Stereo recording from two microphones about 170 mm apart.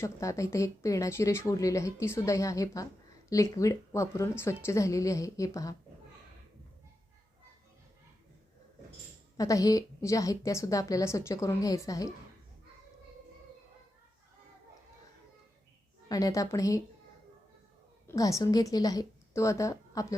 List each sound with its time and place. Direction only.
0.0 s speech: 20° left (ahead or behind)
9.4 s speech: 20° left (ahead or behind)
16.0 s speech: 20° left (ahead or behind)
18.1 s speech: 20° left (ahead or behind)